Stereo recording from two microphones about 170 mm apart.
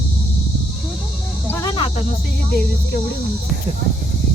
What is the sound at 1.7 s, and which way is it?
Cricket, 30° left (ahead or behind).